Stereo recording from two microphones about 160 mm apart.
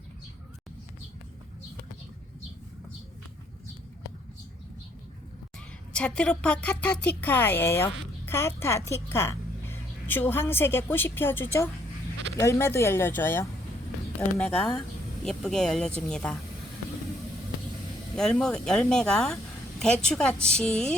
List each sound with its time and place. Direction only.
5.9 s a woman's voice: 5° left (ahead or behind)
18.2 s speech: 5° left (ahead or behind)